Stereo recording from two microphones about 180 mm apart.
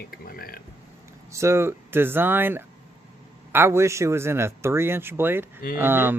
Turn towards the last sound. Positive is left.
turn(degrees=-10)  # may be behind; listen again after turning